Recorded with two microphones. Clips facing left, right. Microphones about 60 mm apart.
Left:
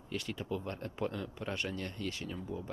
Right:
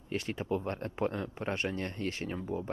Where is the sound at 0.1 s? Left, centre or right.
Right.